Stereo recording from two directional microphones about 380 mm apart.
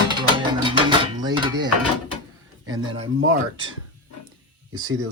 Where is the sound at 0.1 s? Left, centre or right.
Centre.